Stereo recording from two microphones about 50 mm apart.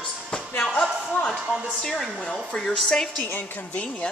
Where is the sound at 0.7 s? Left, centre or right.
Centre.